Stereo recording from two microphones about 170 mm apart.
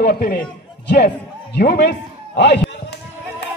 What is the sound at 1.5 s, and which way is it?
Speech, 75° left (ahead or behind).